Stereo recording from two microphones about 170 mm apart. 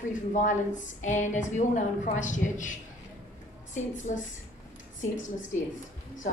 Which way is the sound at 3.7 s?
45° left (ahead or behind).